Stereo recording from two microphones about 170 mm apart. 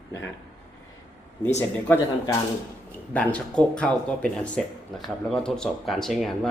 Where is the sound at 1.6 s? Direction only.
10° left (ahead or behind).